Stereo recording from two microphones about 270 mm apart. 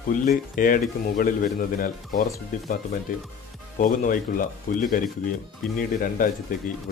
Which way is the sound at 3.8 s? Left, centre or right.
Left.